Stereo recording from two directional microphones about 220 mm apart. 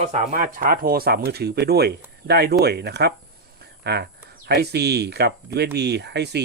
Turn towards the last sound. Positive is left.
turn(degrees=-50)  # may be behind; listen again after turning